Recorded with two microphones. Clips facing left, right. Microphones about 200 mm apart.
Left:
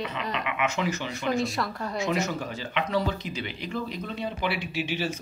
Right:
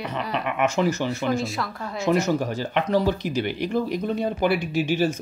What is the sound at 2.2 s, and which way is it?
Speech, 45° right (ahead or behind).